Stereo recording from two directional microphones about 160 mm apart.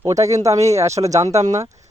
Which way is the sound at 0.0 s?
20° right (ahead or behind).